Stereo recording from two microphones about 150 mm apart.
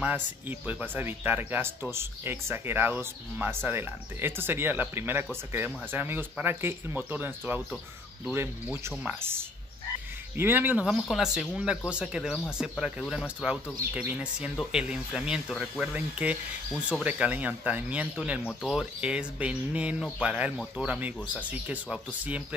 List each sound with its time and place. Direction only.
0.0 s speech: 10° right (ahead or behind)
18.4 s speech: 10° left (ahead or behind)
18.7 s speech: 5° right (ahead or behind)